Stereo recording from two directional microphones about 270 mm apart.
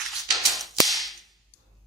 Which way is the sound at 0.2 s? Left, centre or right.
Centre.